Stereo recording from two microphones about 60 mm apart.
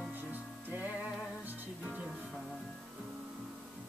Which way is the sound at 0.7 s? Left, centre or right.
Right.